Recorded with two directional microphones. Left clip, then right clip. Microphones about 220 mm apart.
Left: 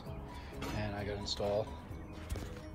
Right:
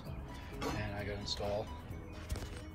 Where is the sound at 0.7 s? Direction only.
10° left (ahead or behind).